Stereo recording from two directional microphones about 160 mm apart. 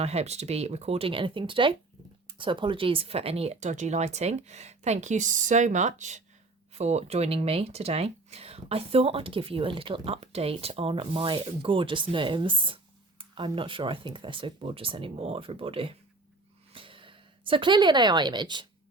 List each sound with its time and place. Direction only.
0.0 s speech: 40° right (ahead or behind)